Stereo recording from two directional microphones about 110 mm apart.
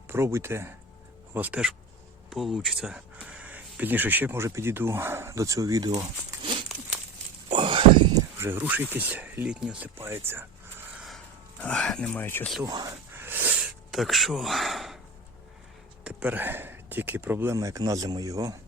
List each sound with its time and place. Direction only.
0.1 s speech: 20° right (ahead or behind)
2.3 s speech: centre (ahead or behind); by 5.9 s 30° right (ahead or behind)
6.7 s crumpling: centre (ahead or behind)
7.5 s a sound: 50° right (ahead or behind)
8.1 s speech: 25° right (ahead or behind)
10.0 s speech: 20° right (ahead or behind)
11.6 s speech: 10° left (ahead or behind)
12.6 s a sound: 35° right (ahead or behind)
13.1 s a sound: 20° right (ahead or behind)
13.9 s speech: centre (ahead or behind)
16.0 s speech: 15° right (ahead or behind); by 18.6 s 35° right (ahead or behind)